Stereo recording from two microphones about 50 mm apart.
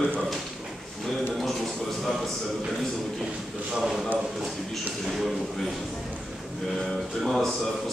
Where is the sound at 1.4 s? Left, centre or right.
Centre.